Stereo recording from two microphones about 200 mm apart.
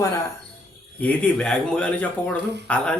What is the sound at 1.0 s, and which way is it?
Speech, 5° left (ahead or behind).